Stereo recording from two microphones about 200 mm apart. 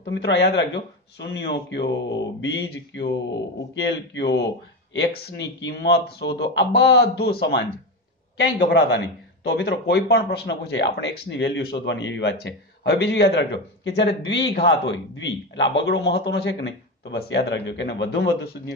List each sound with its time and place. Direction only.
0.0 s speech: 60° left (ahead or behind)